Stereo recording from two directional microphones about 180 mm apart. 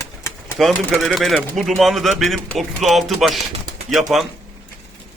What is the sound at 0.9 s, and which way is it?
A man's voice, centre (ahead or behind).